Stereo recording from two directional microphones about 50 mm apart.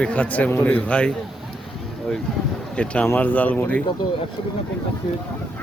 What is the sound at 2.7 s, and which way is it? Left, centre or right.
Speech, left.